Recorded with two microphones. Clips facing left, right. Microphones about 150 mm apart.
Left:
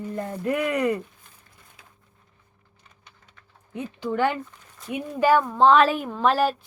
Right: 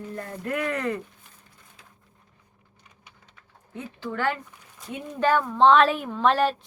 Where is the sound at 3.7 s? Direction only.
15° left (ahead or behind).